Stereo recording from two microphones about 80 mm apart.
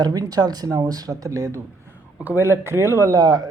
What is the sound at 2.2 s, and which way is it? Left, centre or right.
Speech, right.